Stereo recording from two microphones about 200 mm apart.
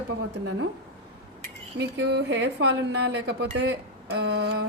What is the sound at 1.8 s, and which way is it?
Speech, 60° right (ahead or behind).